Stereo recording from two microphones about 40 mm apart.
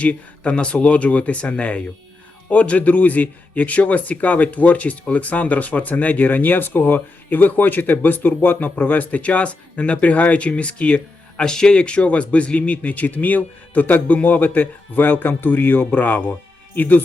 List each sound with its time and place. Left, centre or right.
0.0 s a man's voice: left
11.4 s speech: centre; by 17.0 s left